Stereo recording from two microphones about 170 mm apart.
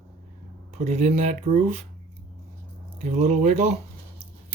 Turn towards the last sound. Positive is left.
turn(degrees=-40)  # may be behind; listen again after turning